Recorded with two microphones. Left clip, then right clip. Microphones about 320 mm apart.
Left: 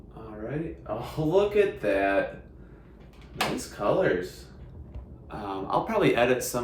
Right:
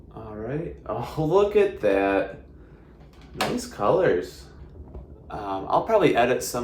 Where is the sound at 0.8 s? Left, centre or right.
Right.